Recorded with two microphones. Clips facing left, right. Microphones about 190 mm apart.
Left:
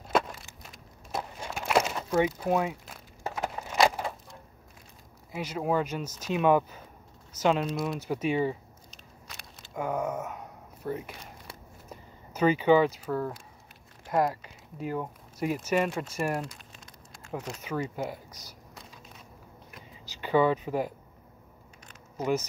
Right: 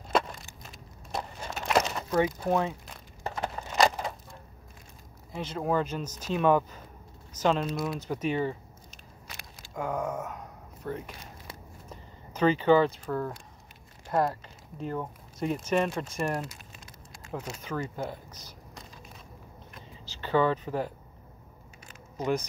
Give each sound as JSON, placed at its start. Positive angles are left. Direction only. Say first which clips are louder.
{"t": 0.1, "sound": "a sound", "louder": "even", "side_deg": 5}
{"t": 5.3, "sound": "speech", "louder": "even", "side_deg": 10}
{"t": 7.6, "sound": "speech", "louder": "left 1 dB", "side_deg": 0}
{"t": 8.1, "sound": "speech", "louder": "left 2 dB", "side_deg": 10}
{"t": 9.3, "sound": "walk", "louder": "right 1 dB", "side_deg": -5}
{"t": 9.8, "sound": "a sound", "louder": "left 1 dB", "side_deg": 15}
{"t": 13.0, "sound": "speech", "louder": "left 1 dB", "side_deg": 5}
{"t": 16.3, "sound": "crumpling", "louder": "left 1 dB", "side_deg": -5}
{"t": 17.6, "sound": "speech", "louder": "left 2 dB", "side_deg": 10}
{"t": 20.1, "sound": "speech", "louder": "left 1 dB", "side_deg": 10}
{"t": 22.1, "sound": "a sound", "louder": "left 1 dB", "side_deg": 5}